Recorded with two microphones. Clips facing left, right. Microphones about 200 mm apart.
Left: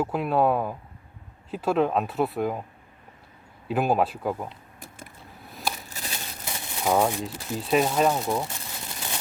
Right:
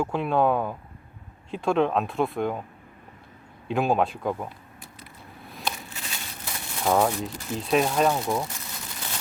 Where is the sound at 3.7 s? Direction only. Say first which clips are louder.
Even; 5° left (ahead or behind).